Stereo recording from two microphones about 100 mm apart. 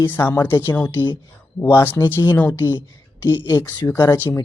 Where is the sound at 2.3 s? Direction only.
15° left (ahead or behind).